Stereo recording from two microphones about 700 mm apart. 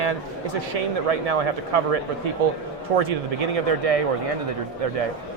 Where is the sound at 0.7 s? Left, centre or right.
Right.